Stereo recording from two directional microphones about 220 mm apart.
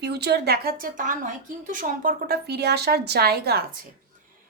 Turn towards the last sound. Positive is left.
turn(degrees=-45)  # may be behind; listen again after turning